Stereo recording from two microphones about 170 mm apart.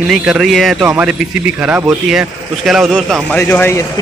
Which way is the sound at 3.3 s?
15° left (ahead or behind).